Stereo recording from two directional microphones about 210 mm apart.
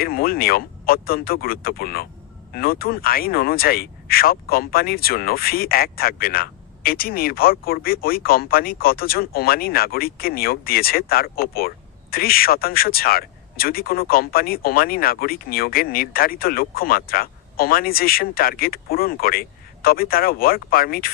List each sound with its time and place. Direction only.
0.0 s speech: 45° left (ahead or behind)